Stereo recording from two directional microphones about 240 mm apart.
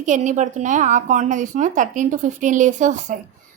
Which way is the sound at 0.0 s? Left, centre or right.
Right.